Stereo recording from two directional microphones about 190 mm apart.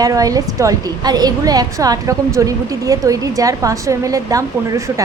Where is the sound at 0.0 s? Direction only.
20° right (ahead or behind).